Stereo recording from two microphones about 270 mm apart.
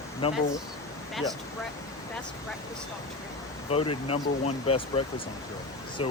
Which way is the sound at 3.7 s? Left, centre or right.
Centre.